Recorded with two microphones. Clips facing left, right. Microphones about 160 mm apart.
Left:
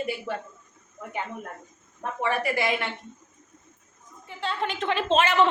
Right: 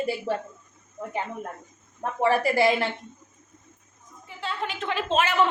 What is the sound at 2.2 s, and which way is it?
Speech, 35° right (ahead or behind).